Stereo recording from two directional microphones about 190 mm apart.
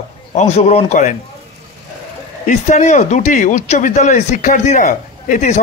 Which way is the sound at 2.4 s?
40° left (ahead or behind).